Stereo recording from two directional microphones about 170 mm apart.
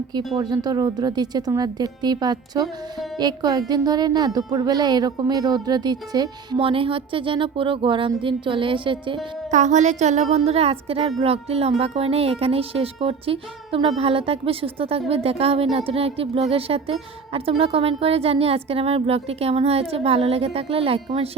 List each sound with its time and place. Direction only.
0.3 s speech: 25° right (ahead or behind)
9.5 s a woman's voice: 45° right (ahead or behind)